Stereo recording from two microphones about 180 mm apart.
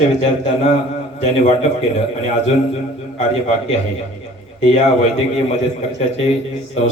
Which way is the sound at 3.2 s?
40° left (ahead or behind).